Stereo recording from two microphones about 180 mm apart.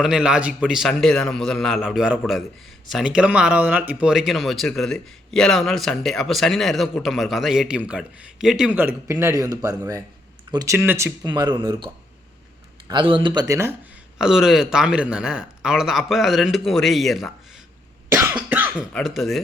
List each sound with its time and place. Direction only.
0.0 s speech: 5° right (ahead or behind)
9.0 s speech: 15° right (ahead or behind)
12.9 s speech: 25° right (ahead or behind)
14.2 s speech: 5° right (ahead or behind)
18.3 s cough: 10° right (ahead or behind)
18.9 s speech: centre (ahead or behind)